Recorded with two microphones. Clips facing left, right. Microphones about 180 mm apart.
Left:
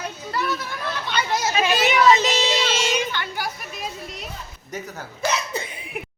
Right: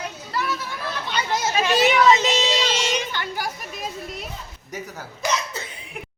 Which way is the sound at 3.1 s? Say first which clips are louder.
Even; 40° right (ahead or behind).